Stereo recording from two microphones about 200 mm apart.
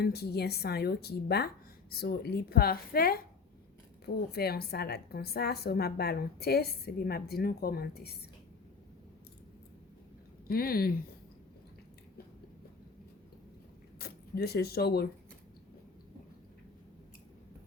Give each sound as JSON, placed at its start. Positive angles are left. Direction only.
{"t": 0.0, "sound": "a woman's voice", "side_deg": 50}
{"t": 10.5, "sound": "a woman's voice", "side_deg": 50}
{"t": 14.0, "sound": "speech", "side_deg": 50}